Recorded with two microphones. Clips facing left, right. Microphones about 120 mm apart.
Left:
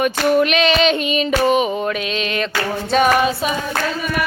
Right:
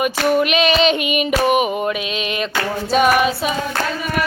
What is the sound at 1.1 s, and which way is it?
Female singing, 15° right (ahead or behind).